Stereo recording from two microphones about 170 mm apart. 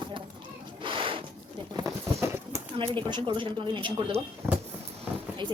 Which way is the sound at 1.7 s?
20° right (ahead or behind).